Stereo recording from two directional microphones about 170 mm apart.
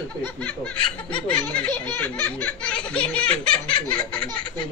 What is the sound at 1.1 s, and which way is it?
Laughter, 5° left (ahead or behind).